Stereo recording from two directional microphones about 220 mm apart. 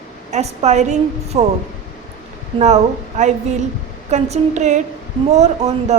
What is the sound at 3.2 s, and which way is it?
Speech, 35° right (ahead or behind).